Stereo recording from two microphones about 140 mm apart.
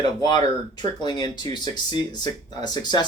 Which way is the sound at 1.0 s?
30° left (ahead or behind).